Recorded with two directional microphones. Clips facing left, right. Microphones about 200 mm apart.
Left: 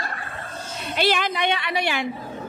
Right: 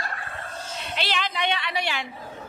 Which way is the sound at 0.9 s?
50° left (ahead or behind).